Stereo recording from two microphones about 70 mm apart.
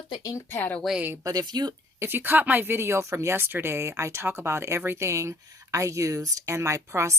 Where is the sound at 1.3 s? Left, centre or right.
Right.